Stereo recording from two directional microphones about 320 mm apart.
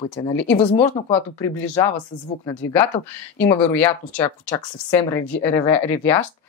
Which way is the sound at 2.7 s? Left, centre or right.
Centre.